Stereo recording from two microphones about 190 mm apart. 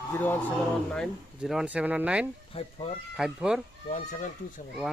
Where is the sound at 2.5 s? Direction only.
30° left (ahead or behind).